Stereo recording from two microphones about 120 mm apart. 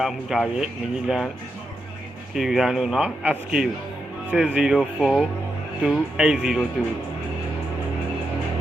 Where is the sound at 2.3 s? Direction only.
5° right (ahead or behind).